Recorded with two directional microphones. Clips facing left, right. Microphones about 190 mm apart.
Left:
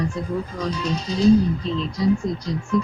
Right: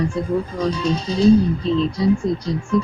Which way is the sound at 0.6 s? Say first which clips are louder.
Right 5 dB; 30° right (ahead or behind).